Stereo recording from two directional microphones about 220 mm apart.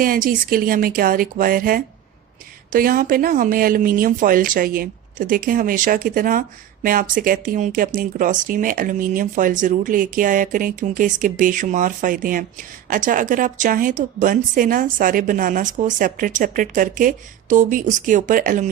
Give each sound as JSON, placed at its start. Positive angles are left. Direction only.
{"t": 0.0, "sound": "a woman's voice", "side_deg": -40}